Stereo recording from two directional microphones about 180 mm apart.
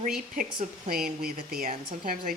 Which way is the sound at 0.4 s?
50° right (ahead or behind).